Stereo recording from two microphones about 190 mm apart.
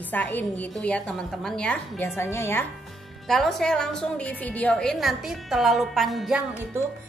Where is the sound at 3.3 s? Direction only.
Centre (ahead or behind).